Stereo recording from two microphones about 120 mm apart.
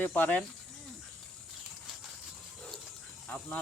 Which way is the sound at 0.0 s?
15° left (ahead or behind).